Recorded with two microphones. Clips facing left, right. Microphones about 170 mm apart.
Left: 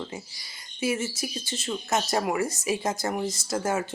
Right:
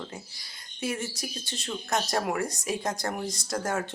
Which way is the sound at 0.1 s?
5° left (ahead or behind).